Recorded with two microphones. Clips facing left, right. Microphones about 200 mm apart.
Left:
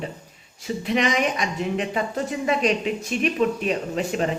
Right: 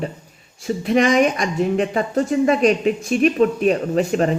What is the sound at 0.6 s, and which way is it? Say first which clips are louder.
Speech: right 6 dB; 45° right (ahead or behind).